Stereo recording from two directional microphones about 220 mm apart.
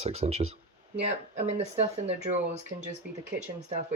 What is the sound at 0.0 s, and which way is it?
Speech, 30° right (ahead or behind).